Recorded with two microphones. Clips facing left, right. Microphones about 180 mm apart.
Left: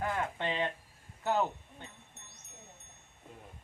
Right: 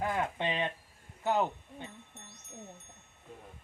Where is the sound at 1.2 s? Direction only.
15° right (ahead or behind).